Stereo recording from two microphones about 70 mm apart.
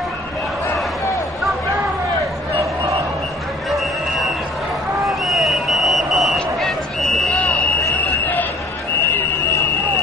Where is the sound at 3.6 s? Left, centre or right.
Centre.